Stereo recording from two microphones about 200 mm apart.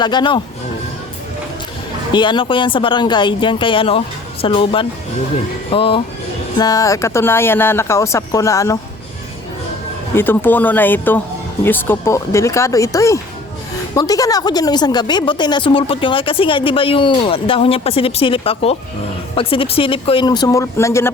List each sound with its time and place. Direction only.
0.0 s speech: 20° left (ahead or behind)
2.1 s speech: 25° left (ahead or behind)
10.2 s speech: 10° left (ahead or behind)